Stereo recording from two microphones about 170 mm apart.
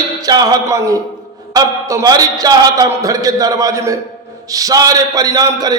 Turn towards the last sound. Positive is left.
turn(degrees=-20)  # may be behind; listen again after turning